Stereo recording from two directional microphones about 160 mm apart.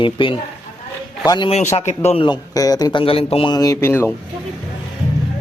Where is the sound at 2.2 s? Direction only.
25° left (ahead or behind).